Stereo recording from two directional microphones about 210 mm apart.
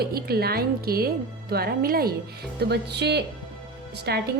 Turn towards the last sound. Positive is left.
turn(degrees=-50)  # may be behind; listen again after turning